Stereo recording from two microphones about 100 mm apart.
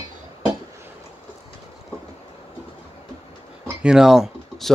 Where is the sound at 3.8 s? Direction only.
5° right (ahead or behind).